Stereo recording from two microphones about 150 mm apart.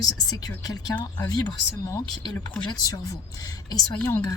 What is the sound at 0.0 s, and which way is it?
Speech, 25° left (ahead or behind).